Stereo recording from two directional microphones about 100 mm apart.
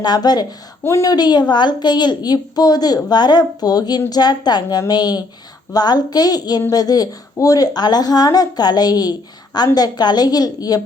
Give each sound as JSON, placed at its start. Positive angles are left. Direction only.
{"t": 0.0, "sound": "a woman's voice", "side_deg": 45}
{"t": 0.9, "sound": "a woman's voice", "side_deg": 30}
{"t": 1.1, "sound": "a woman's voice", "side_deg": 45}